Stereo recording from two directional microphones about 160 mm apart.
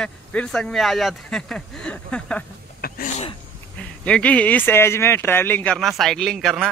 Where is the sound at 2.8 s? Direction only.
65° left (ahead or behind).